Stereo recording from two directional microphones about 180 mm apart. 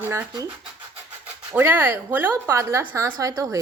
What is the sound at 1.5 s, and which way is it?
A woman's voice, 10° right (ahead or behind).